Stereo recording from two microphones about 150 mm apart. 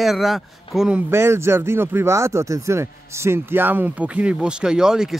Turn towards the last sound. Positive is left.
turn(degrees=-5)  # may be behind; listen again after turning